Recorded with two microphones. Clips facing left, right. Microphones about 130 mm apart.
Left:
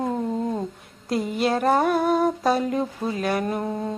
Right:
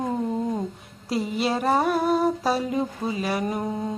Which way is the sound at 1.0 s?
Centre (ahead or behind).